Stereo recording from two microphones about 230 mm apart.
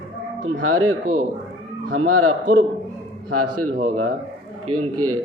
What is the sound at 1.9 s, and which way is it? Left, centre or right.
Speech, right.